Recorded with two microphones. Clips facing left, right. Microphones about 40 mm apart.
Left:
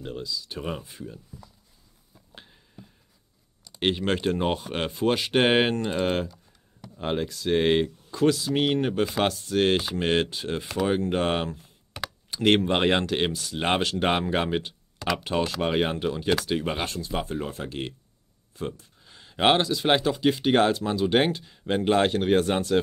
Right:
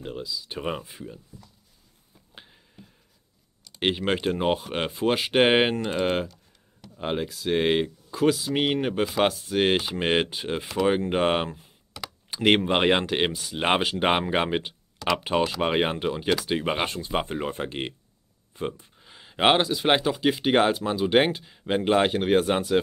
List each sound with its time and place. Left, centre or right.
0.0 s speech: centre
0.5 s speech: right
2.3 s a sound: centre
3.8 s speech: centre